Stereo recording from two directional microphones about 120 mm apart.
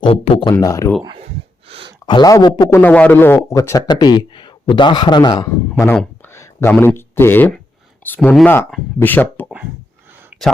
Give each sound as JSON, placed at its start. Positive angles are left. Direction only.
{"t": 0.0, "sound": "speech", "side_deg": 50}
{"t": 0.6, "sound": "a man's voice", "side_deg": 30}
{"t": 1.6, "sound": "a sound", "side_deg": -55}
{"t": 2.0, "sound": "a man's voice", "side_deg": 40}
{"t": 2.3, "sound": "a man's voice", "side_deg": 30}
{"t": 2.8, "sound": "a man's voice", "side_deg": 15}
{"t": 5.7, "sound": "speech", "side_deg": 15}